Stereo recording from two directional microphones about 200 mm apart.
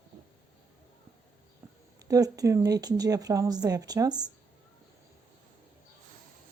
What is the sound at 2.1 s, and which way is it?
Speech, 20° right (ahead or behind).